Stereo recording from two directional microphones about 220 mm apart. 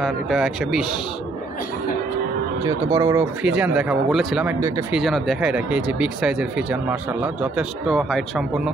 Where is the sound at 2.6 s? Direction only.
15° right (ahead or behind).